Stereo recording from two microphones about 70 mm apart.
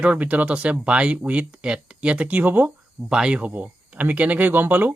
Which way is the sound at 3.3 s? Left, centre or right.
Right.